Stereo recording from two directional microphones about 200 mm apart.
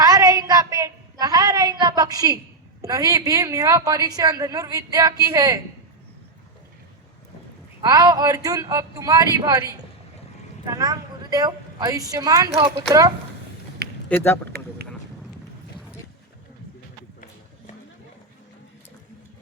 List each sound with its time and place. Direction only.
0.0 s a sound: 20° right (ahead or behind)
2.8 s a woman's voice: 15° right (ahead or behind)
7.8 s a woman's voice: 20° right (ahead or behind)
14.1 s speech: 10° left (ahead or behind)